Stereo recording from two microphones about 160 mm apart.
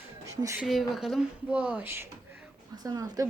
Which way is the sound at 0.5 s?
Centre (ahead or behind).